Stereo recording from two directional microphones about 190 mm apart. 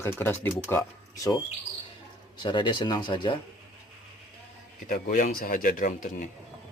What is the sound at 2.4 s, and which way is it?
Speech, 25° left (ahead or behind).